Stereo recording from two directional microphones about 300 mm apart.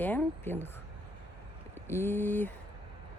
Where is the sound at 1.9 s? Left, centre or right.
Centre.